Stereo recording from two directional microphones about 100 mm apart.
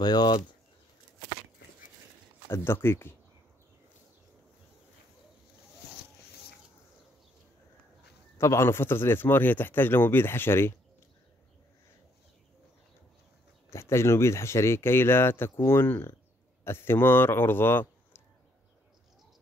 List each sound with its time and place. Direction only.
0.0 s speech: 45° left (ahead or behind)
2.5 s speech: 25° left (ahead or behind)
8.4 s speech: 30° left (ahead or behind)
13.7 s speech: 25° left (ahead or behind)